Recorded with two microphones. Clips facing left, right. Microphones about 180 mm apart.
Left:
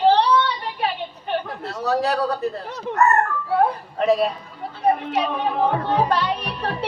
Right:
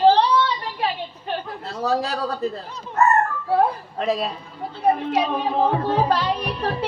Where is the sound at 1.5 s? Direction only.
70° left (ahead or behind).